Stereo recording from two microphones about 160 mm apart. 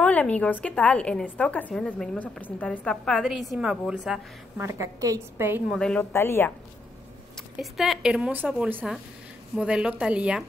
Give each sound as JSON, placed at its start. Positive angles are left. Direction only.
{"t": 0.0, "sound": "a woman's voice", "side_deg": 10}
{"t": 4.6, "sound": "a woman's voice", "side_deg": -20}
{"t": 5.7, "sound": "a woman's voice", "side_deg": 5}
{"t": 6.1, "sound": "a woman's voice", "side_deg": 15}
{"t": 7.5, "sound": "a woman's voice", "side_deg": 0}